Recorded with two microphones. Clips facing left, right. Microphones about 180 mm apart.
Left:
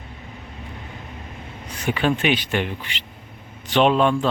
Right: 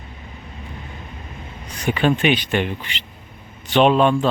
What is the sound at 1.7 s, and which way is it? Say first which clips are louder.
Speech: right 3 dB; 5° left (ahead or behind).